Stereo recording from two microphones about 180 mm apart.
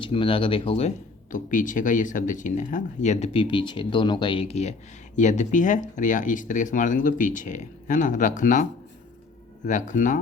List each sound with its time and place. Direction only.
0.0 s speech: 30° left (ahead or behind); by 8.6 s 45° left (ahead or behind)
9.6 s speech: 45° left (ahead or behind)